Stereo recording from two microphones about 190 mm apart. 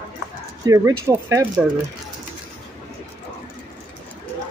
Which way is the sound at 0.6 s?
15° right (ahead or behind).